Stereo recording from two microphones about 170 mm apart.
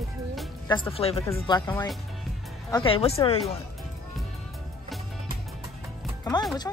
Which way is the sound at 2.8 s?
35° left (ahead or behind).